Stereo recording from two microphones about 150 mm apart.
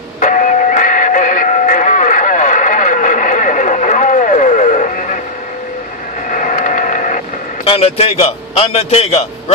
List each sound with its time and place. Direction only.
0.2 s radio: 60° left (ahead or behind)
6.3 s printer: 55° left (ahead or behind)
7.6 s a man's voice: 40° left (ahead or behind)